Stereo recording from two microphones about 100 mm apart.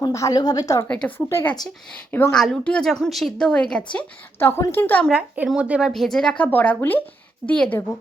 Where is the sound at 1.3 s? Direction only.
25° left (ahead or behind).